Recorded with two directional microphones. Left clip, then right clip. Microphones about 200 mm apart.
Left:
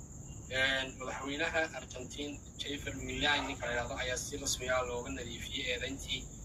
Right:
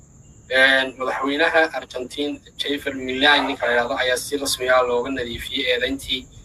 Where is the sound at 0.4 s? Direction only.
50° right (ahead or behind).